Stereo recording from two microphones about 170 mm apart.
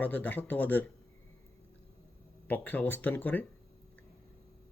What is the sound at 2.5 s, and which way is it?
Speech, 10° left (ahead or behind).